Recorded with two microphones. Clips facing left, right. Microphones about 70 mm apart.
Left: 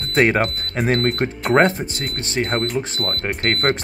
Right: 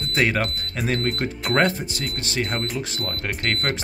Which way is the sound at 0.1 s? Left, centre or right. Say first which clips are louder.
Left 6 dB; left.